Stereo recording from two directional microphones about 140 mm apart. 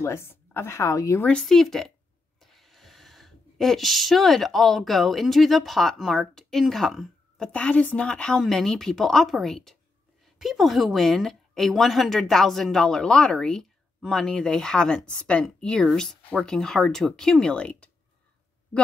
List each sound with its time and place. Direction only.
0.0 s a woman's voice: 20° left (ahead or behind)
1.2 s a woman's voice: 5° left (ahead or behind)